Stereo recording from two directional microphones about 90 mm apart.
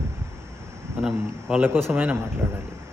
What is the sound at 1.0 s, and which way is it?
Speech, 5° right (ahead or behind).